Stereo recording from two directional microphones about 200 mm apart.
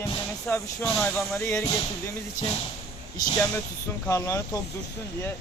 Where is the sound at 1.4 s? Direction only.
15° left (ahead or behind).